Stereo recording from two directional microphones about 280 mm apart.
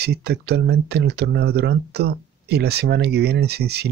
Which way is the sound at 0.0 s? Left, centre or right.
Right.